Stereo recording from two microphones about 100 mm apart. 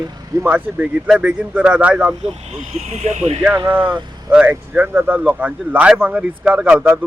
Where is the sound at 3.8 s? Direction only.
55° right (ahead or behind).